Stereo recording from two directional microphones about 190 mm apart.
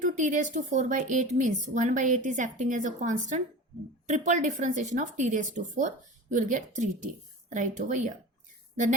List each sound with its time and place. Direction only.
0.3 s a woman's voice: 40° right (ahead or behind)